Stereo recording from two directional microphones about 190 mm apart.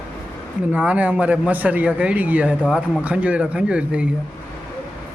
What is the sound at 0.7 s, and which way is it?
Speech, 5° right (ahead or behind).